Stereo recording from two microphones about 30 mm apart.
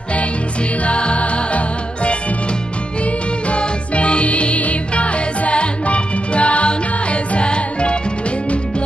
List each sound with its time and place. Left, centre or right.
0.8 s music: left
3.4 s music: left